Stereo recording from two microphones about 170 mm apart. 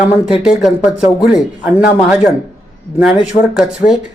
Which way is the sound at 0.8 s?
5° right (ahead or behind).